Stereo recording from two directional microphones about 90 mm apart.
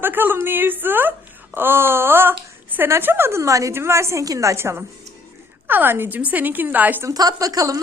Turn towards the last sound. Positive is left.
turn(degrees=-40)  # may be behind; listen again after turning